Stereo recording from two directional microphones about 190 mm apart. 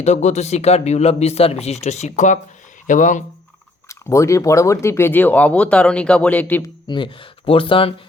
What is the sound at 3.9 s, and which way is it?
Speech, 15° left (ahead or behind).